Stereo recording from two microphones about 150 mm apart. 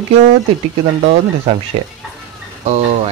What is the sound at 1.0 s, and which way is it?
Speech, 45° right (ahead or behind).